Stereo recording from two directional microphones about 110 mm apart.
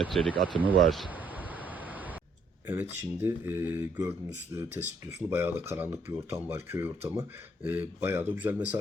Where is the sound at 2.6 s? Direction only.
20° right (ahead or behind).